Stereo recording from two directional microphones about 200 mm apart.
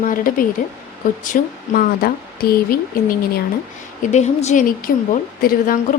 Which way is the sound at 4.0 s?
35° left (ahead or behind).